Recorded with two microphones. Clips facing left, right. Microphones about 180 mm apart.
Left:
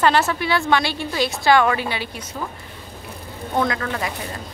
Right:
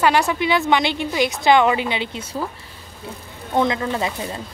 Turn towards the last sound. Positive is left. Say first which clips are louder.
# right 3 dB
turn(degrees=-25)  # may be behind; listen again after turning